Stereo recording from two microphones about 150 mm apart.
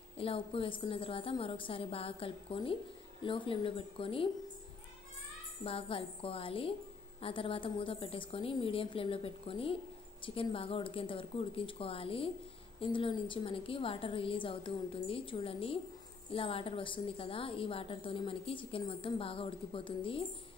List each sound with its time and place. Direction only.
0.2 s a woman's voice: 40° left (ahead or behind)
5.6 s a woman's voice: 40° left (ahead or behind)